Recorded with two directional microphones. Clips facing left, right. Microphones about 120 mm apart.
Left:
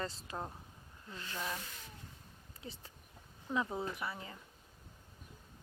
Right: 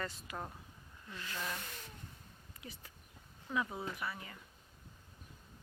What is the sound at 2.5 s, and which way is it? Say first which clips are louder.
Speech: left 3 dB; 30° left (ahead or behind).